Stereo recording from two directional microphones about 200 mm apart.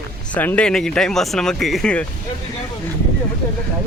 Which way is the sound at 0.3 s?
5° left (ahead or behind).